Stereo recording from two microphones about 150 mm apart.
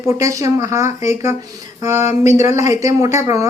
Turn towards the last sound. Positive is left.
turn(degrees=-20)  # may be behind; listen again after turning